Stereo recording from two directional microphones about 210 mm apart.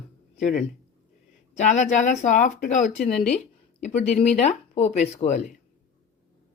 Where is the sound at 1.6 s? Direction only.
35° left (ahead or behind).